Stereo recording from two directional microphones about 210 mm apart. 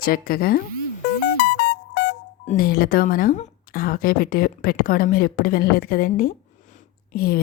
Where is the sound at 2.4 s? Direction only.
40° left (ahead or behind).